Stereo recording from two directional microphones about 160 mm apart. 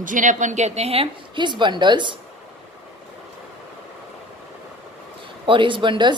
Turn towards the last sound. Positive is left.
turn(degrees=-30)  # may be behind; listen again after turning